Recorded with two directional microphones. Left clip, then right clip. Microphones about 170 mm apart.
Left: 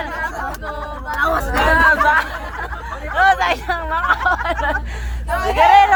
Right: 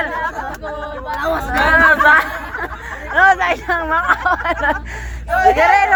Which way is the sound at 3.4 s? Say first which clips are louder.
Right 1 dB; 10° right (ahead or behind).